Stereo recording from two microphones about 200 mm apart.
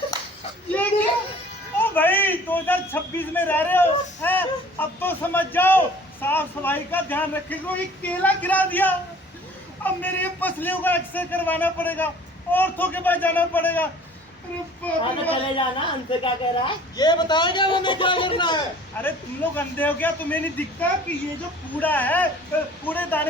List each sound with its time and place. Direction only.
0.7 s a sound: 10° left (ahead or behind)
1.8 s a man's voice: 10° left (ahead or behind)
15.0 s a woman's voice: 25° left (ahead or behind)
19.0 s a man's voice: 10° left (ahead or behind)